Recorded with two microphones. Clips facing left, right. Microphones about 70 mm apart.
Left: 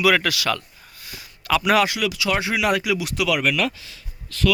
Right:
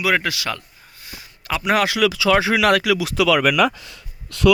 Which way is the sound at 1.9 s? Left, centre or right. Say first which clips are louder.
Right 6 dB; right.